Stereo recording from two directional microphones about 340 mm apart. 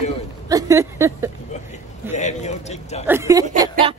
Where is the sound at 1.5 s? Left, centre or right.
Left.